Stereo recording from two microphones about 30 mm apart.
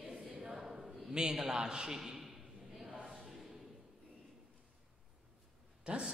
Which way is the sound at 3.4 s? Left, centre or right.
Centre.